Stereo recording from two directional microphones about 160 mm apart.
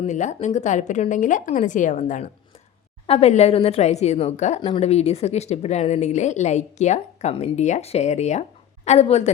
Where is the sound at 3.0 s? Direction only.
40° left (ahead or behind).